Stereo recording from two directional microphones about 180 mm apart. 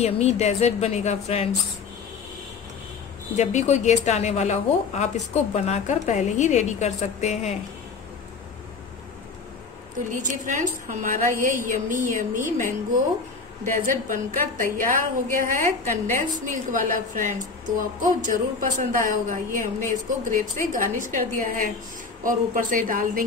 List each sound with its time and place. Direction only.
0.0 s speech: 35° left (ahead or behind)
3.3 s speech: 40° left (ahead or behind)
10.1 s a woman's voice: 45° right (ahead or behind)
13.8 s a woman's voice: 50° right (ahead or behind)